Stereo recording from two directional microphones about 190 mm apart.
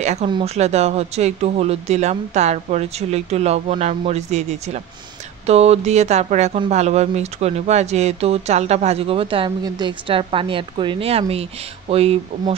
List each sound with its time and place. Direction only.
0.0 s speech: 35° right (ahead or behind)